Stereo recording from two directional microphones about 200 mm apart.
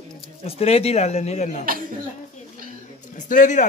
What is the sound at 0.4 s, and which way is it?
Speech, 30° left (ahead or behind).